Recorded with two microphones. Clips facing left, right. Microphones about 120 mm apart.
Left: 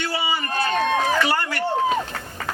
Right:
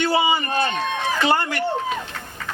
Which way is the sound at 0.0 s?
20° right (ahead or behind).